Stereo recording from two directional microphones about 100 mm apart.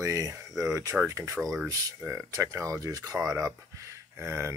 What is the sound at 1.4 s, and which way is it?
Speech, centre (ahead or behind).